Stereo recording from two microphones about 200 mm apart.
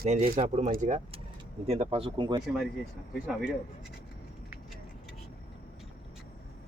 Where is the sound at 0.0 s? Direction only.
30° right (ahead or behind).